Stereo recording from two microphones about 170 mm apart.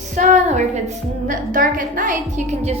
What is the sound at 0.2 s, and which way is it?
A woman's voice, 45° right (ahead or behind).